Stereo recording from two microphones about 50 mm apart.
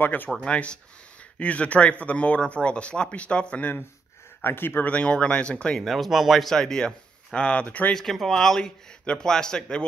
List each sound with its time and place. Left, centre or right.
0.0 s speech: left
0.4 s speech: left
4.4 s speech: left
4.8 s speech: left
5.8 s speech: centre
6.5 s a man's voice: centre; by 7.9 s left
7.9 s a man's voice: centre